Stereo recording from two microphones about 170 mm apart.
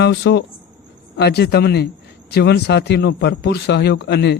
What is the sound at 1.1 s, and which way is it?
A man's voice, 75° left (ahead or behind).